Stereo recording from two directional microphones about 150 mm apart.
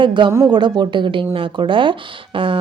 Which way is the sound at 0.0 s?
30° right (ahead or behind).